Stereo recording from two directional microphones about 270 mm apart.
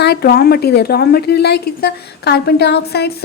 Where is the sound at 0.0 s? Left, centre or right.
Left.